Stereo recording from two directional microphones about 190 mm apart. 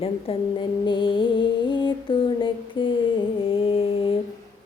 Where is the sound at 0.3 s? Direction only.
30° left (ahead or behind).